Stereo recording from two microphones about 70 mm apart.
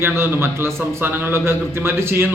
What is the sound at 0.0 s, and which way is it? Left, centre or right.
Speech, right.